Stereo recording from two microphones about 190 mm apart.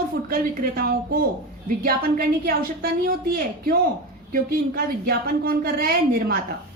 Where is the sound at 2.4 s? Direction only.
50° right (ahead or behind).